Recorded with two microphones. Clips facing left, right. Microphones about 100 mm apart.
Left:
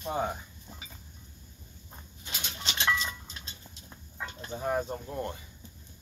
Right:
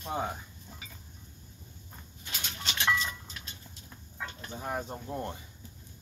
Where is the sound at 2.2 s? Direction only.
15° left (ahead or behind).